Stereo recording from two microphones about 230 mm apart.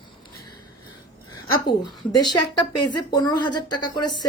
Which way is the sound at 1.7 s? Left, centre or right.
Centre.